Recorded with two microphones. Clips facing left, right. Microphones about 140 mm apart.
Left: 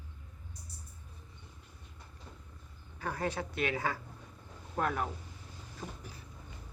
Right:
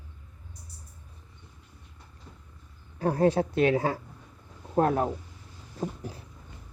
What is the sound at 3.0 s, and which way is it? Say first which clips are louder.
Speech: right 12 dB; 35° right (ahead or behind).